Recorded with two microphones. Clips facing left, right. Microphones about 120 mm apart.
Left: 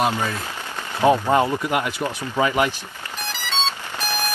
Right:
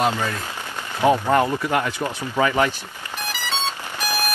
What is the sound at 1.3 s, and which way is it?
Speech, 15° left (ahead or behind).